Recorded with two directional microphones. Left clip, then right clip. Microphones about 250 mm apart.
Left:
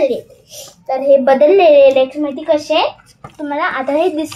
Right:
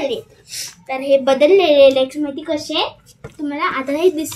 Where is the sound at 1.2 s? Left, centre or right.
Right.